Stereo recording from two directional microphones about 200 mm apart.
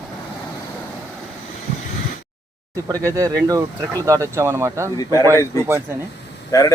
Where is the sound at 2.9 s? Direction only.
15° right (ahead or behind).